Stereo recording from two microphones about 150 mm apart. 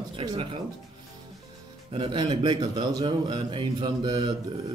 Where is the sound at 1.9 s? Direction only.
30° right (ahead or behind).